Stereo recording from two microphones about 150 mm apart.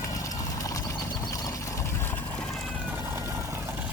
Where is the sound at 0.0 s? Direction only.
20° left (ahead or behind); by 2.6 s 5° left (ahead or behind).